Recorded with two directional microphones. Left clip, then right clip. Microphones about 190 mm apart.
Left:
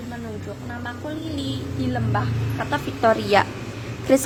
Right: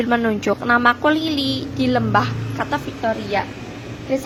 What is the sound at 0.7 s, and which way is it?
Speech, 40° right (ahead or behind).